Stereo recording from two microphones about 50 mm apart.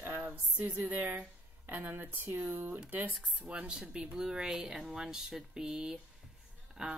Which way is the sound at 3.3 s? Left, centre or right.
Right.